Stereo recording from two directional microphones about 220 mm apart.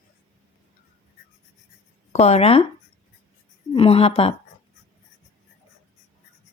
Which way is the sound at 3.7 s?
25° left (ahead or behind).